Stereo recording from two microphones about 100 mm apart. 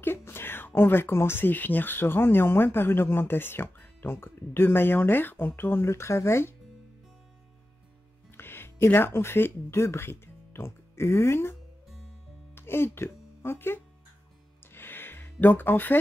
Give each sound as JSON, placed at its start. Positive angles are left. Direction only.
{"t": 0.0, "sound": "speech", "side_deg": 25}
{"t": 8.4, "sound": "speech", "side_deg": 20}
{"t": 12.5, "sound": "speech", "side_deg": 25}
{"t": 14.6, "sound": "a sound", "side_deg": 20}